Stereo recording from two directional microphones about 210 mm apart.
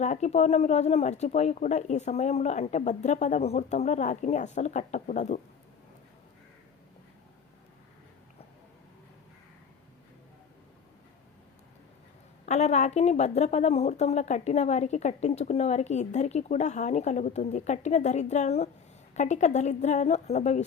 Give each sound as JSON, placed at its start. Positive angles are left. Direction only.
{"t": 0.0, "sound": "a woman's voice", "side_deg": 35}
{"t": 12.5, "sound": "a woman's voice", "side_deg": 30}